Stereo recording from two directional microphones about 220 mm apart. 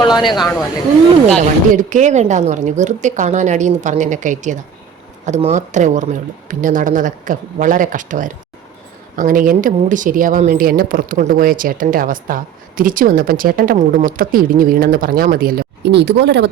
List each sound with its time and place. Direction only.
0.0 s speech: 20° left (ahead or behind)
1.4 s speech: 35° right (ahead or behind); by 16.5 s 50° right (ahead or behind)